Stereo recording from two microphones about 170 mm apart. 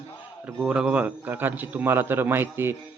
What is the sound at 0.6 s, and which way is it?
A man's voice, 5° right (ahead or behind).